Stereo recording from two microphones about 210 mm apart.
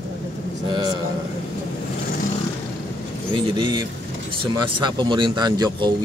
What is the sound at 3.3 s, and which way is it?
Speech, 25° right (ahead or behind).